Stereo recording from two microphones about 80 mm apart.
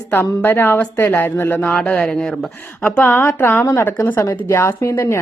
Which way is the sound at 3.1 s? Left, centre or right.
Left.